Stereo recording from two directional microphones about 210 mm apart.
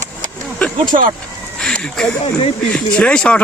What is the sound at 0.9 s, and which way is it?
Speech, 35° right (ahead or behind).